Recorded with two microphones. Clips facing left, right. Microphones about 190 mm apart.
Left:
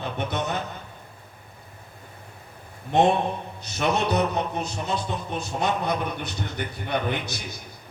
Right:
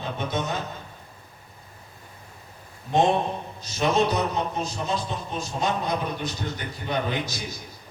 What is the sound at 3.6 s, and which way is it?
A man's voice, 60° left (ahead or behind).